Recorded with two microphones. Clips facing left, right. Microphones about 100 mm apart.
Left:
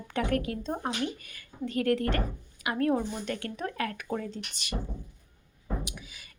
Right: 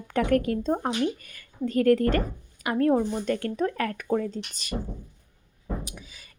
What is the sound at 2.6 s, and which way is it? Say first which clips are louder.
Speech: right 5 dB; 30° right (ahead or behind).